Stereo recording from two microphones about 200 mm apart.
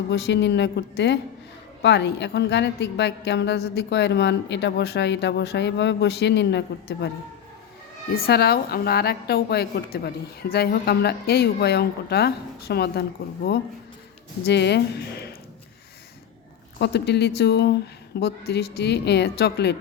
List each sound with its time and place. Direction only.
0.1 s a woman's voice: 60° left (ahead or behind)
8.1 s a woman's voice: 50° left (ahead or behind)
16.7 s a woman's voice: 55° left (ahead or behind)